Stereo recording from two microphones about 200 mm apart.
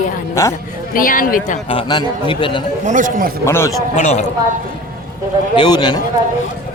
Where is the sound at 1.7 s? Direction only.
25° left (ahead or behind).